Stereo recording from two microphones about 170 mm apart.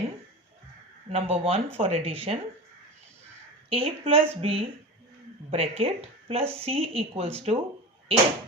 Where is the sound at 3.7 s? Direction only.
35° right (ahead or behind).